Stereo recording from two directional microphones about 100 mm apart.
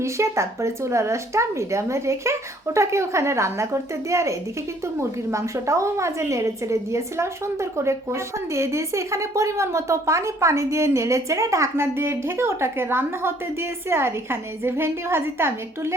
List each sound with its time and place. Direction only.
0.0 s a woman's voice: 30° right (ahead or behind)